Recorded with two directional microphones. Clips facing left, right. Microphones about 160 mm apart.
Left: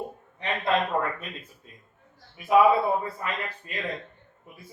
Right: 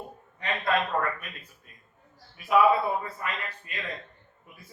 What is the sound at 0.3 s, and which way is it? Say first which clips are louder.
A man's voice: left 2 dB; 25° left (ahead or behind).